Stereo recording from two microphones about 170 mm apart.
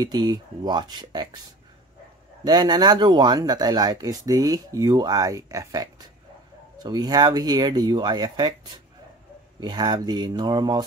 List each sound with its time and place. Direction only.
0.0 s speech: 25° right (ahead or behind)
2.4 s speech: 25° right (ahead or behind)